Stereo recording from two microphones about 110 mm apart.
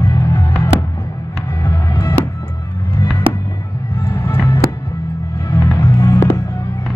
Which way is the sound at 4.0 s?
25° left (ahead or behind).